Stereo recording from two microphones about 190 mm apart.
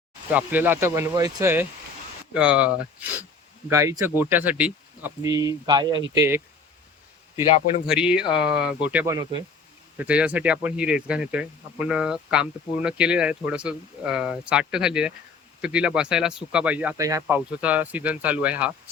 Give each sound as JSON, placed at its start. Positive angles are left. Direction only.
{"t": 0.3, "sound": "speech", "side_deg": -10}
{"t": 7.9, "sound": "speech", "side_deg": -5}